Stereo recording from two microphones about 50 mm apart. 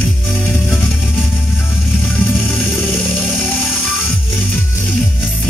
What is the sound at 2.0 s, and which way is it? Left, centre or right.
Music, left.